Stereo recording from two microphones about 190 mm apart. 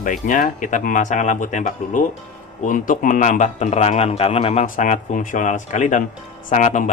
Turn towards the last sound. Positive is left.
turn(degrees=40)  # may be behind; listen again after turning